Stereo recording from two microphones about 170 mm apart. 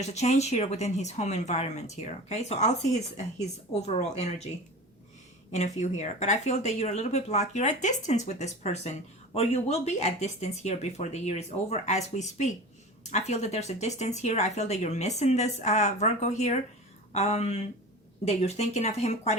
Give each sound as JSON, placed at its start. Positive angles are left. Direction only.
{"t": 0.0, "sound": "speech", "side_deg": 40}
{"t": 5.5, "sound": "speech", "side_deg": 45}